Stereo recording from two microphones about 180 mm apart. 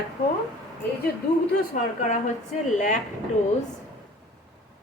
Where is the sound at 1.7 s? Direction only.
45° left (ahead or behind).